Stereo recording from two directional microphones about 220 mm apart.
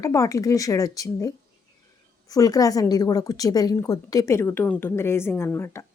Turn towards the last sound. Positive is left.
turn(degrees=10)  # may be behind; listen again after turning